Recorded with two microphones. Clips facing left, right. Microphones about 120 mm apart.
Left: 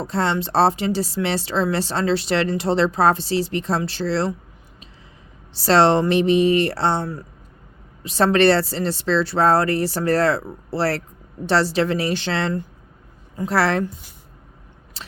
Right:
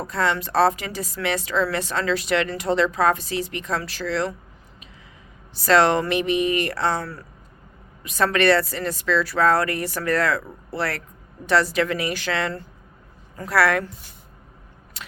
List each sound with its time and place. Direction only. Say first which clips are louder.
0.0 s a woman's voice: left 2 dB; 30° left (ahead or behind)
5.5 s a woman's voice: left 2 dB; 30° left (ahead or behind)
15.0 s biting: left 1 dB; 30° left (ahead or behind)